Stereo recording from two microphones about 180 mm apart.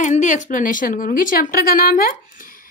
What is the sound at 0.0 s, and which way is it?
Speech, 45° left (ahead or behind).